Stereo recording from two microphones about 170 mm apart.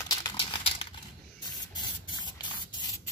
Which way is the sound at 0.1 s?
25° left (ahead or behind).